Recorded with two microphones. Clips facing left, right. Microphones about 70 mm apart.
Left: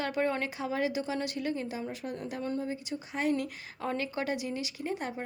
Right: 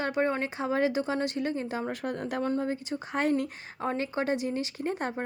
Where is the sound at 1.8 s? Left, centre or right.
Right.